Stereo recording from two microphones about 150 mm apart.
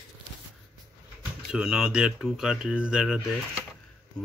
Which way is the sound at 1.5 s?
5° right (ahead or behind).